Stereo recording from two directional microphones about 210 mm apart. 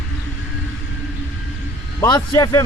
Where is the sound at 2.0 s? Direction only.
15° left (ahead or behind).